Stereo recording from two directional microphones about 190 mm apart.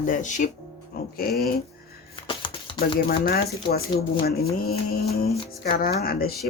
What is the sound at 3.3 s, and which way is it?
Speech, 55° left (ahead or behind).